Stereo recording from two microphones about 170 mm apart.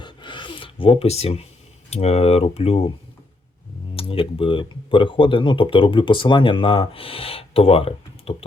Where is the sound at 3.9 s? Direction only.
35° left (ahead or behind).